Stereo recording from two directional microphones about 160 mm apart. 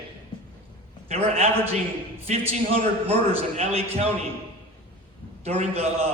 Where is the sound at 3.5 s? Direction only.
40° right (ahead or behind).